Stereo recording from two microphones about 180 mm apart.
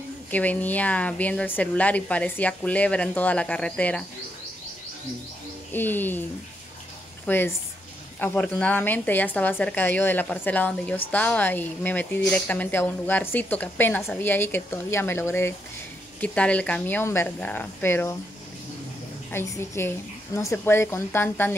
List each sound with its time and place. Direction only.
0.3 s speech: 10° left (ahead or behind)
5.7 s speech: 10° left (ahead or behind)
7.2 s speech: 10° left (ahead or behind)
19.3 s speech: 15° left (ahead or behind)